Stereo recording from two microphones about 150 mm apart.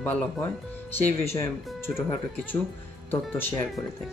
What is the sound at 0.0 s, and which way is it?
Speech, 10° left (ahead or behind).